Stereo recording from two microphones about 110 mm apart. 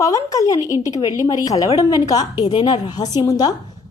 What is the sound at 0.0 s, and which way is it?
A woman's voice, 30° left (ahead or behind).